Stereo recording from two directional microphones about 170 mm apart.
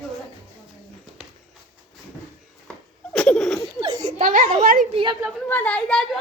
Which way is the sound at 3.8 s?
20° right (ahead or behind).